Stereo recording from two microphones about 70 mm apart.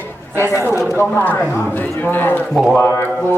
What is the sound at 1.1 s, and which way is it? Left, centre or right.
Speech, left.